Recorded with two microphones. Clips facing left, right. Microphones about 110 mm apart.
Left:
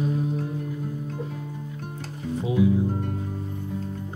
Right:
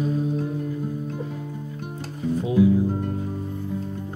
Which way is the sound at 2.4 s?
20° left (ahead or behind).